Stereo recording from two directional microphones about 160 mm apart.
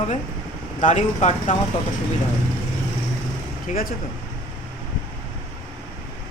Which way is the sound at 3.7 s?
55° left (ahead or behind).